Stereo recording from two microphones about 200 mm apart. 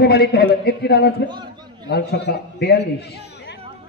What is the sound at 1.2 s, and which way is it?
Speech, 20° right (ahead or behind).